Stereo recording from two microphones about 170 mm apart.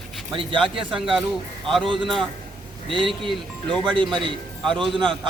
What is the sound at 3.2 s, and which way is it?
Speech, 30° right (ahead or behind).